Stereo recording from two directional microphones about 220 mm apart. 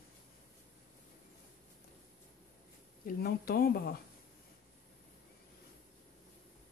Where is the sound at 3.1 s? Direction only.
45° left (ahead or behind).